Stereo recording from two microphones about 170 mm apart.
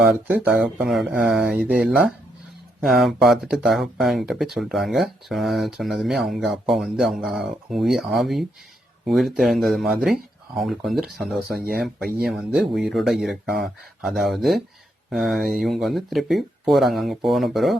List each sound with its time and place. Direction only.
0.0 s speech: 10° right (ahead or behind)
11.4 s speech: 60° right (ahead or behind)
11.8 s speech: centre (ahead or behind)